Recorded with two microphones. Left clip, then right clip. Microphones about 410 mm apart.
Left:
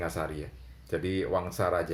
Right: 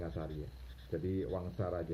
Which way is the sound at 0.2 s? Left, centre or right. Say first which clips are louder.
Left 10 dB; centre.